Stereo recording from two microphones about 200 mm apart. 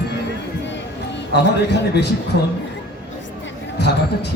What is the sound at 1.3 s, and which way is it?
Music, 55° left (ahead or behind).